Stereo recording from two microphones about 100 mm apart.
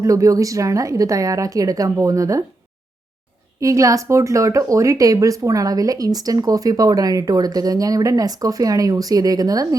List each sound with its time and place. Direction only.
0.0 s speech: 35° right (ahead or behind)
3.6 s speech: 35° right (ahead or behind)